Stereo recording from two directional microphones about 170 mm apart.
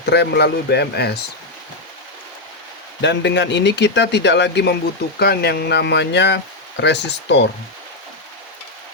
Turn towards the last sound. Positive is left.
turn(degrees=90)